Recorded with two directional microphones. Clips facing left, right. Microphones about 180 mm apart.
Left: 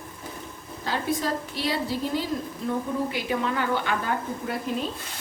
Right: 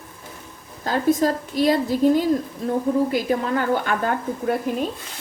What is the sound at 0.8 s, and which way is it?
Speech, 45° right (ahead or behind).